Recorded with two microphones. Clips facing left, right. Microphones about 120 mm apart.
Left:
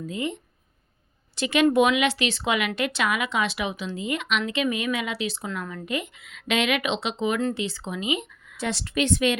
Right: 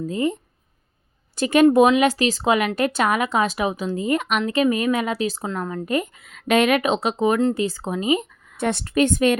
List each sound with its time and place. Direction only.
0.0 s speech: 40° right (ahead or behind)
1.4 s speech: 45° right (ahead or behind)
1.6 s speech: 35° right (ahead or behind)